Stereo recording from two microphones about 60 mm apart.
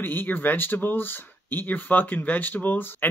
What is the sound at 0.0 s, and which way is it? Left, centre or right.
Speech, left.